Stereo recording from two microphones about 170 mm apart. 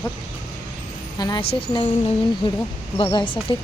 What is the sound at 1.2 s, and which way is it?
Speech, 30° left (ahead or behind).